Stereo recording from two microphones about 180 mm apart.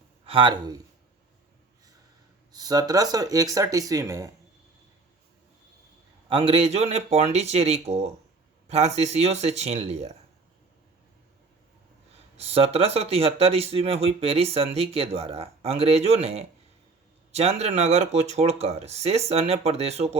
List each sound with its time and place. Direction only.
0.3 s speech: 30° right (ahead or behind)
2.5 s speech: 20° right (ahead or behind)
6.2 s speech: 30° right (ahead or behind)
12.4 s speech: 35° right (ahead or behind)